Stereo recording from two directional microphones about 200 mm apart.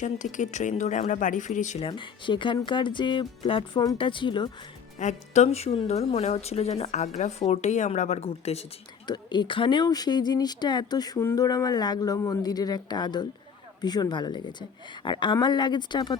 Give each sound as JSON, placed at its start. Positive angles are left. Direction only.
{"t": 0.0, "sound": "speech", "side_deg": 40}
{"t": 1.9, "sound": "speech", "side_deg": 25}
{"t": 4.9, "sound": "speech", "side_deg": 35}